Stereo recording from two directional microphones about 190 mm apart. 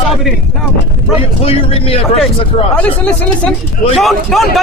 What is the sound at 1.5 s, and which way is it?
A man's voice, 30° left (ahead or behind).